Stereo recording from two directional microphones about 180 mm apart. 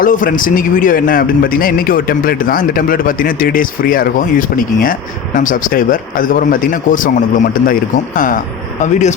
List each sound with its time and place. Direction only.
0.0 s a man's voice: 50° left (ahead or behind)